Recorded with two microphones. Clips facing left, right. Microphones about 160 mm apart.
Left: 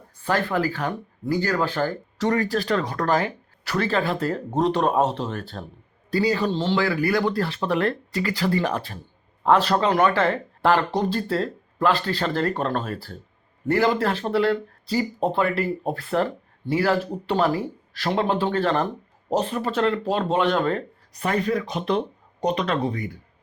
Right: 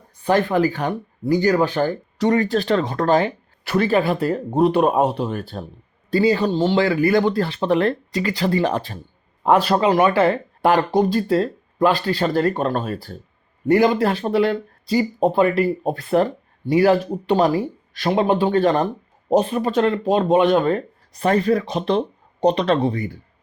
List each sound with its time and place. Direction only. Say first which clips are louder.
0.2 s speech: right 6 dB; 20° right (ahead or behind)
9.4 s speech: right 3 dB; 10° right (ahead or behind)
21.2 s speech: right 6 dB; 35° right (ahead or behind)